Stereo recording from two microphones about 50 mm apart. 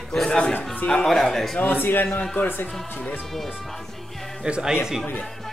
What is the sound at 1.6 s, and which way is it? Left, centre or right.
Speech, left.